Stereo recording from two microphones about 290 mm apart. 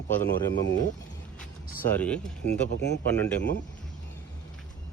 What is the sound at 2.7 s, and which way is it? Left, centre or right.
Speech, left.